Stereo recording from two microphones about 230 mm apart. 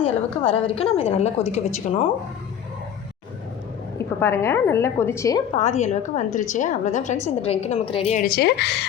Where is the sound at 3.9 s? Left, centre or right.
Centre.